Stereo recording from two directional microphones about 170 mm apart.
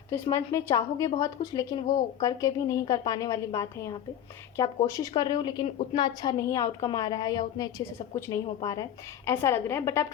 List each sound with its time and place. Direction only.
0.1 s a woman's voice: 15° left (ahead or behind)